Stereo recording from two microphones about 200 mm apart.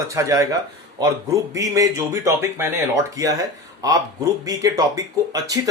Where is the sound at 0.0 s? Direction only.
15° right (ahead or behind).